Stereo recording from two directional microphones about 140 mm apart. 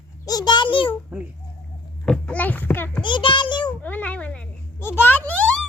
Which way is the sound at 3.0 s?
35° left (ahead or behind).